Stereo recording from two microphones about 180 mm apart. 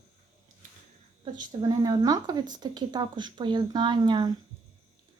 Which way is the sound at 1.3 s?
20° right (ahead or behind).